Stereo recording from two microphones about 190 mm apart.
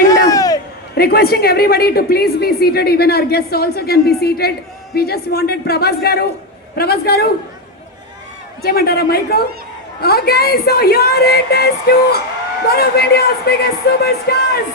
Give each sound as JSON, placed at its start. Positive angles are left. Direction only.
{"t": 0.1, "sound": "a sound", "side_deg": 20}
{"t": 0.9, "sound": "a woman's voice", "side_deg": 55}
{"t": 8.6, "sound": "a woman's voice", "side_deg": 55}